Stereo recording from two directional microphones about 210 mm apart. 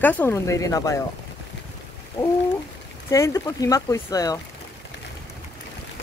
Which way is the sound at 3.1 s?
15° left (ahead or behind).